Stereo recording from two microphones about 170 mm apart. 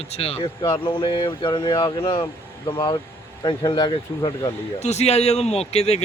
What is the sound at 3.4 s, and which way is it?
Speech, 25° left (ahead or behind).